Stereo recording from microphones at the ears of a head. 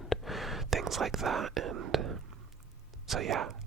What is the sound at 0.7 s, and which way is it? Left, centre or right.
Speech, right.